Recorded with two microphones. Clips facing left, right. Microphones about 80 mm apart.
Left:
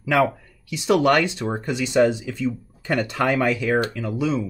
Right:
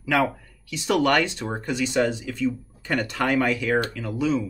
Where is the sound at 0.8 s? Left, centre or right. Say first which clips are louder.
Left 3 dB; centre.